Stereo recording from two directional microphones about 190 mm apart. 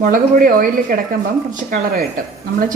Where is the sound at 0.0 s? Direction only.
45° right (ahead or behind).